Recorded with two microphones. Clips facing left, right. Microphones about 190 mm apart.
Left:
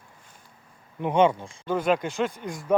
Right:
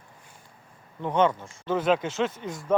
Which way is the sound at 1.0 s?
10° left (ahead or behind).